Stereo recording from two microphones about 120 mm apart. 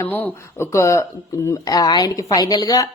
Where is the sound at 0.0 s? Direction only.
20° left (ahead or behind).